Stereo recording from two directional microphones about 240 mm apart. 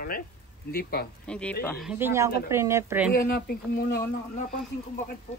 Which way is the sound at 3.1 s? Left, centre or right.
Left.